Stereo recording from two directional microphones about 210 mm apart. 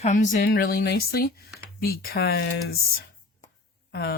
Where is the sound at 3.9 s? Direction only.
50° left (ahead or behind).